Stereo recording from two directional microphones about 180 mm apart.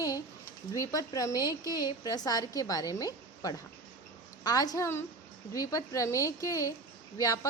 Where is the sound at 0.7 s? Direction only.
20° left (ahead or behind).